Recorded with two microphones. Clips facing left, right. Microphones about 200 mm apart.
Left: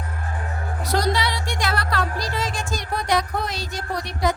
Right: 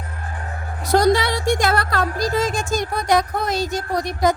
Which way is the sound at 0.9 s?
50° right (ahead or behind).